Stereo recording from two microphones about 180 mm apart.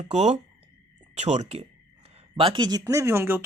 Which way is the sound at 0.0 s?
35° right (ahead or behind).